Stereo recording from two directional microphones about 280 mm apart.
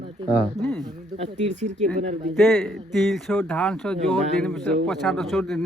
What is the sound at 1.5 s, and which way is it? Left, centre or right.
Speech, right.